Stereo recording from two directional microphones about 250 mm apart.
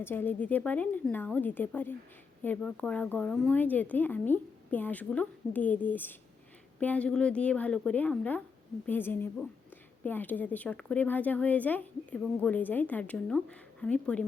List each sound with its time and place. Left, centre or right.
0.0 s speech: centre